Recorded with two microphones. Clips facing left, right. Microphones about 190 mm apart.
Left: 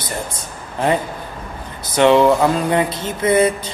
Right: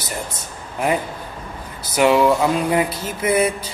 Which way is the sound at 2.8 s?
30° left (ahead or behind).